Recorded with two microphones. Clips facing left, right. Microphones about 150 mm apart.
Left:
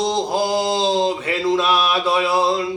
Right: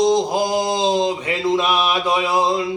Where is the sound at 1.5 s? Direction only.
15° right (ahead or behind).